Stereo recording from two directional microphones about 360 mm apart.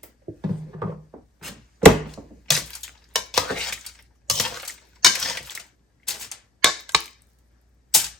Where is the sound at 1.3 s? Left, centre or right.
Centre.